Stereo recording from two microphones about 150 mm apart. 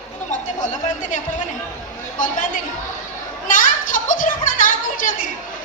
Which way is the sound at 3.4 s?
65° left (ahead or behind).